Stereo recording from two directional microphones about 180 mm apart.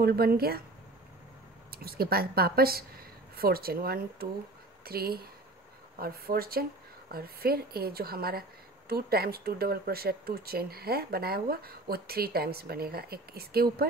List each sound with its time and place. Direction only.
0.0 s speech: 60° right (ahead or behind)
1.7 s speech: 55° right (ahead or behind)